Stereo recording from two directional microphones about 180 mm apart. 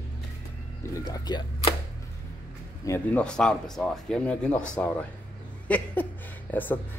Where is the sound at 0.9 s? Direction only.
20° left (ahead or behind).